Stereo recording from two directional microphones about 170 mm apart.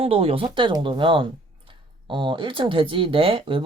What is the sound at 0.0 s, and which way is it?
Speech, 35° right (ahead or behind).